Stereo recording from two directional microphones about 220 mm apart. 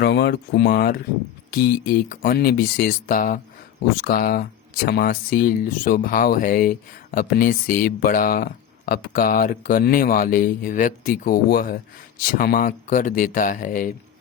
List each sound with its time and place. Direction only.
0.0 s speech: 50° left (ahead or behind)